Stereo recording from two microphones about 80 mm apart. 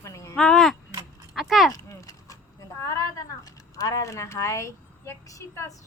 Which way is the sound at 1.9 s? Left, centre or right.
Left.